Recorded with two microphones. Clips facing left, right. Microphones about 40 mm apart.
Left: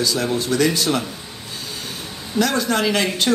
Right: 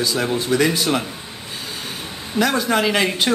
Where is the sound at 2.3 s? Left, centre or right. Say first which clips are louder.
Right 1 dB; centre.